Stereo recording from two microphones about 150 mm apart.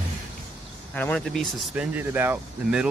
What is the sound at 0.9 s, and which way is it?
Speech, 10° left (ahead or behind).